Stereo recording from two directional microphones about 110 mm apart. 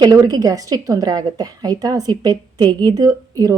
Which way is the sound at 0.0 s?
35° right (ahead or behind).